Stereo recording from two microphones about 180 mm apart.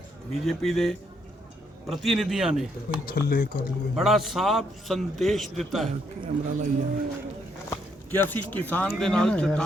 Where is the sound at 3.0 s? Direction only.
55° left (ahead or behind).